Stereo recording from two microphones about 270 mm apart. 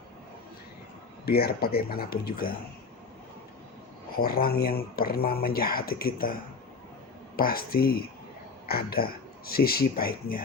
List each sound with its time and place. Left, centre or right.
1.2 s speech: left
4.1 s speech: left
7.3 s speech: left